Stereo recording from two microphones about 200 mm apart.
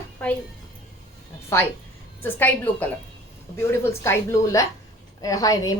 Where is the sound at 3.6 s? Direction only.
10° left (ahead or behind).